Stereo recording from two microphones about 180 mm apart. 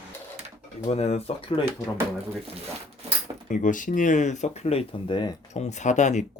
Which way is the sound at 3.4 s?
45° left (ahead or behind).